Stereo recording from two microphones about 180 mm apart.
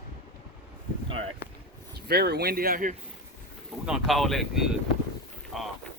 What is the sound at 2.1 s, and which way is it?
Speech, 65° right (ahead or behind).